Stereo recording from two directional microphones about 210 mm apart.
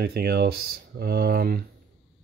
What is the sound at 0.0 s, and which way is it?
Speech, 50° right (ahead or behind).